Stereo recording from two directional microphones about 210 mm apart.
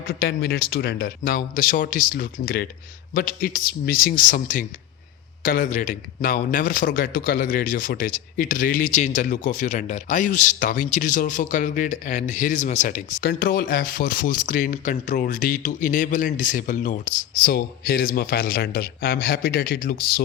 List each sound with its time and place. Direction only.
0.1 s speech: 50° left (ahead or behind)